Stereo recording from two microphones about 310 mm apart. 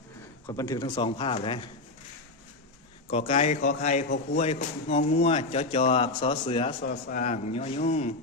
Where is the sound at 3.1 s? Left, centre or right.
Centre.